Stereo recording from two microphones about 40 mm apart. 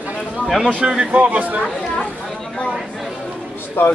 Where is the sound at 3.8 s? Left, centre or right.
Left.